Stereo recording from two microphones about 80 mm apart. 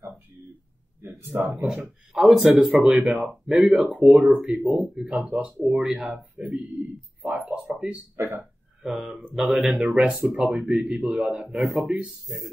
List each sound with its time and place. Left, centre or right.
1.0 s speech: right
1.6 s speech: centre
8.8 s speech: centre